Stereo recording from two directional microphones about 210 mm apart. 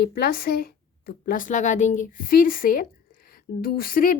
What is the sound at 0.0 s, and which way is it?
A woman's voice, 45° left (ahead or behind).